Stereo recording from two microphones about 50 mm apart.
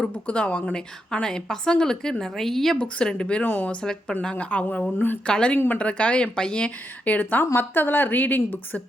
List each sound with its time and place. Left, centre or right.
0.3 s a woman's voice: left; by 2.7 s centre
2.7 s speech: centre
3.4 s a woman's voice: left
4.9 s a woman's voice: left
5.2 s speech: centre
5.5 s a woman's voice: left
5.8 s speech: left
7.0 s a woman's voice: left